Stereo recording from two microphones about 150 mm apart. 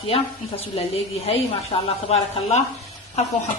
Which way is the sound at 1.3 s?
40° left (ahead or behind).